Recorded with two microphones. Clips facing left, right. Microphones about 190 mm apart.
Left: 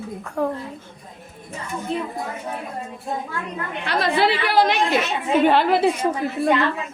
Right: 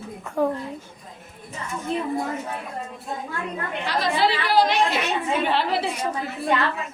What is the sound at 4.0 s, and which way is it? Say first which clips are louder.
A woman's voice: left 3 dB; 60° left (ahead or behind).